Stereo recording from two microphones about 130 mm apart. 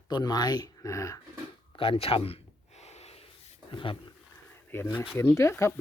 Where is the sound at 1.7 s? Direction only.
45° left (ahead or behind).